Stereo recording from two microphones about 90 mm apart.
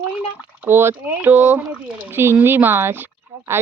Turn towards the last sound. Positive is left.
turn(degrees=-25)  # may be behind; listen again after turning